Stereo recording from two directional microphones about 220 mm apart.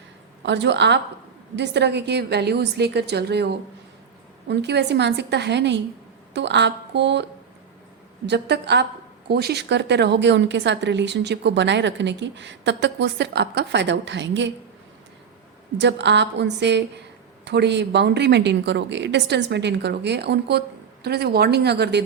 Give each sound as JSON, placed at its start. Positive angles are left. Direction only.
{"t": 0.4, "sound": "a woman's voice", "side_deg": -50}
{"t": 8.3, "sound": "a woman's voice", "side_deg": -50}
{"t": 15.8, "sound": "a woman's voice", "side_deg": -55}